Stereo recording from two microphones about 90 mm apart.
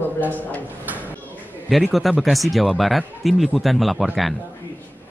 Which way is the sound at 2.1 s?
Centre (ahead or behind).